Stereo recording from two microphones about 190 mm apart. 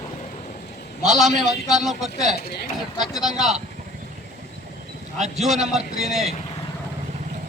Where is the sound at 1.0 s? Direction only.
Centre (ahead or behind).